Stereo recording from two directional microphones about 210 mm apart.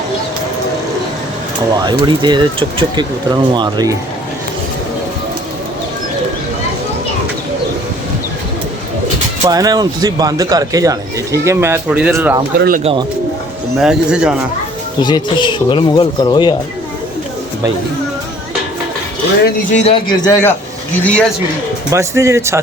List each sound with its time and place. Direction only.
1.8 s speech: 20° right (ahead or behind)
9.5 s speech: 15° right (ahead or behind)
12.5 s speech: 45° right (ahead or behind)
12.8 s speech: 25° right (ahead or behind)
13.7 s speech: 5° right (ahead or behind)
15.0 s speech: 20° left (ahead or behind)
19.8 s a man's voice: 25° left (ahead or behind); by 21.2 s 10° left (ahead or behind)
21.8 s speech: 15° right (ahead or behind)